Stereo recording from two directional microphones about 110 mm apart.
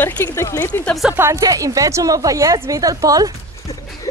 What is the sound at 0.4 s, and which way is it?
Speech, 20° left (ahead or behind).